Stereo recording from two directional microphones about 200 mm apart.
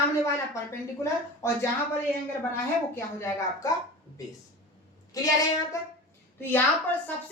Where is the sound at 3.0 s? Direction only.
15° left (ahead or behind).